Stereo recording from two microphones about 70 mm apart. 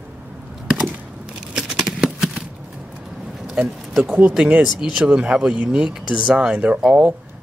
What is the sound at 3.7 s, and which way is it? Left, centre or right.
Speech, centre.